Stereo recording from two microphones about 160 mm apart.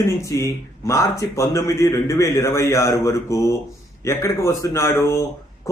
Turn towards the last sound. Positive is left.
turn(degrees=15)  # may be behind; listen again after turning